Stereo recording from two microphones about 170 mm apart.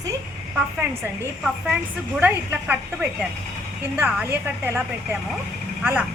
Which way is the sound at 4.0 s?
10° right (ahead or behind).